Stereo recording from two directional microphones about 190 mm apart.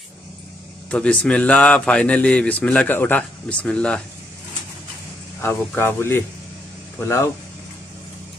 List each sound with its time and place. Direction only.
0.8 s speech: 5° left (ahead or behind)
5.4 s speech: 10° left (ahead or behind)